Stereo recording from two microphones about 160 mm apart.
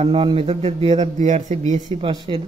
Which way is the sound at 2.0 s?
35° right (ahead or behind).